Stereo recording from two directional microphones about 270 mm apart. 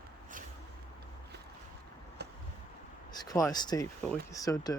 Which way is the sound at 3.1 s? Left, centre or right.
Centre.